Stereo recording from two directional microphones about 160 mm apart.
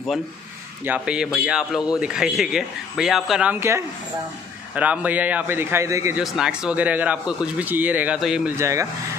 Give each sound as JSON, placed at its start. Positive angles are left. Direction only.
{"t": 0.8, "sound": "a man's voice", "side_deg": -5}
{"t": 6.1, "sound": "a man's voice", "side_deg": -5}
{"t": 8.5, "sound": "a man's voice", "side_deg": -20}